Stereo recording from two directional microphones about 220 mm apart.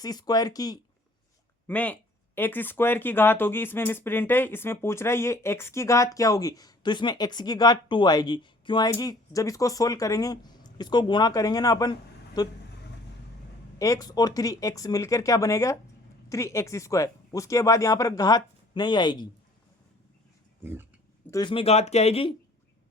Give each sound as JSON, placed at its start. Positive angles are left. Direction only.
{"t": 0.0, "sound": "speech", "side_deg": 20}
{"t": 1.6, "sound": "speech", "side_deg": 5}
{"t": 13.7, "sound": "speech", "side_deg": 15}
{"t": 21.2, "sound": "speech", "side_deg": 20}